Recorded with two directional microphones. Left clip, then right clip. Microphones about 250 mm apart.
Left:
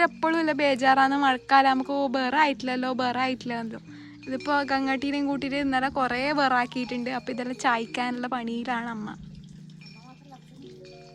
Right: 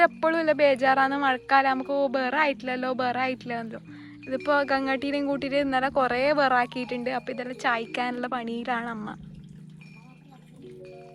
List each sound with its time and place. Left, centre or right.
0.0 s speech: centre